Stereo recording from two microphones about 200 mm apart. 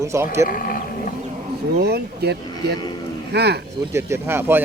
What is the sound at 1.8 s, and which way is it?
Speech, 55° right (ahead or behind).